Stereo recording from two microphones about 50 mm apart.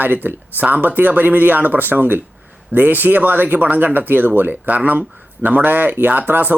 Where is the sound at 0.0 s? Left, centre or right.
Right.